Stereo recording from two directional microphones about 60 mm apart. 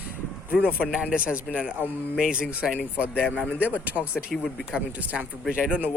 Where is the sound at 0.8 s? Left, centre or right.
Centre.